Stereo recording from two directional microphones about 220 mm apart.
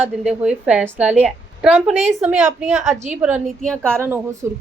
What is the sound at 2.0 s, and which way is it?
Speech, 30° right (ahead or behind).